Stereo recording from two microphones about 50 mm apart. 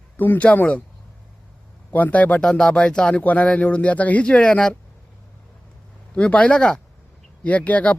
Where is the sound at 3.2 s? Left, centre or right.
Left.